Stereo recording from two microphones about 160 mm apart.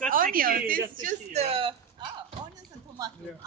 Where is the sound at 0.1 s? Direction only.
60° right (ahead or behind).